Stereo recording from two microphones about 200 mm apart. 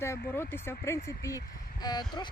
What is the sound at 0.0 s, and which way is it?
Speech, 10° left (ahead or behind).